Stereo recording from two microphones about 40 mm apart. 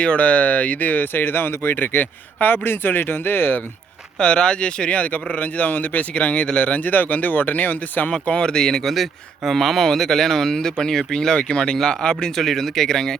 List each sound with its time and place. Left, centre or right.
0.0 s speech: left
1.0 s speech: left
4.2 s speech: left
6.1 s speech: left
8.3 s speech: left
8.8 s speech: centre
12.4 s speech: centre